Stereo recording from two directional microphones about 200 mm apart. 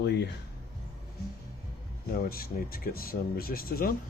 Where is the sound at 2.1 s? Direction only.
50° left (ahead or behind).